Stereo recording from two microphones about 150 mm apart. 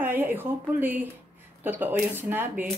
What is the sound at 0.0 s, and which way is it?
Speech, 10° right (ahead or behind).